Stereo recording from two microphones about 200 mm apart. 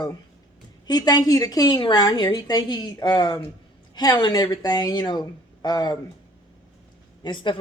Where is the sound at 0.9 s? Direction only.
20° left (ahead or behind).